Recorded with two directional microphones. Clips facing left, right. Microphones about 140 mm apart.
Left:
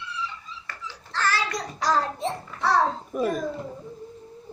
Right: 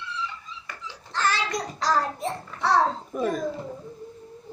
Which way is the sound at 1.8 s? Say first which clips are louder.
Left 1 dB; 20° left (ahead or behind).